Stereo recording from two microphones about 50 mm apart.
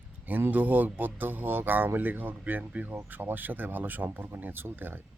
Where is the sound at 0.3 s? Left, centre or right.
Right.